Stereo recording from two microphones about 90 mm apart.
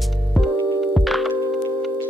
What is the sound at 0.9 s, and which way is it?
Music, centre (ahead or behind).